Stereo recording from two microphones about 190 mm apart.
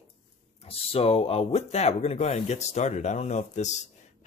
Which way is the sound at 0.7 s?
30° left (ahead or behind).